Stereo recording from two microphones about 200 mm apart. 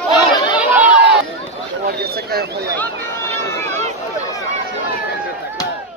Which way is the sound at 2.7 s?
10° left (ahead or behind).